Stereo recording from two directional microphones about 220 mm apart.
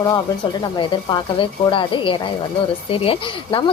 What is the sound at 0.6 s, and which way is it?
A woman's voice, 20° left (ahead or behind).